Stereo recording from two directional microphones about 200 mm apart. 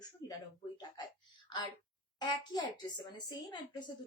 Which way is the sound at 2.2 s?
20° left (ahead or behind).